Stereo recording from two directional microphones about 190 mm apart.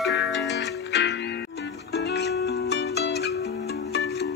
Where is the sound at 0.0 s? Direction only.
65° left (ahead or behind).